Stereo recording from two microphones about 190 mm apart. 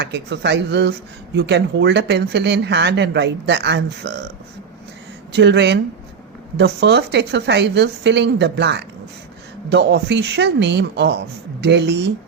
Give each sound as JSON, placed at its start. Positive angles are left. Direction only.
{"t": 0.0, "sound": "speech", "side_deg": -65}
{"t": 5.4, "sound": "speech", "side_deg": -65}